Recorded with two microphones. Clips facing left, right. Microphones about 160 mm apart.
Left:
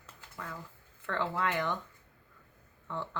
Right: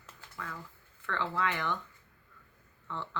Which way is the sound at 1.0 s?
10° left (ahead or behind).